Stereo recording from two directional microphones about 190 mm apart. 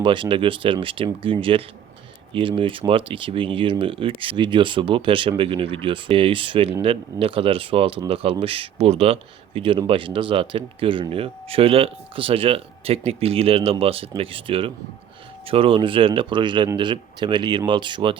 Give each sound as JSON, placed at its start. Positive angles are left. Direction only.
{"t": 0.0, "sound": "speech", "side_deg": -25}